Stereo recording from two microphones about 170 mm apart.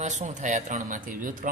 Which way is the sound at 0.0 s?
45° right (ahead or behind).